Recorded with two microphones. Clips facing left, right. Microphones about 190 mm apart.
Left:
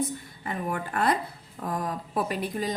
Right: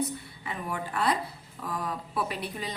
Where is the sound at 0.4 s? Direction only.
50° left (ahead or behind).